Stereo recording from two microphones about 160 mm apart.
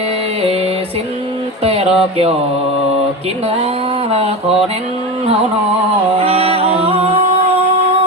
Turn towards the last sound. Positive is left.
turn(degrees=-40)  # may be behind; listen again after turning